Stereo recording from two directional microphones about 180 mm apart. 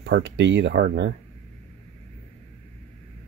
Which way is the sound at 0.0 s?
90° right.